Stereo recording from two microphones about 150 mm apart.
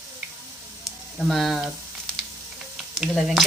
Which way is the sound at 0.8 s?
Centre (ahead or behind).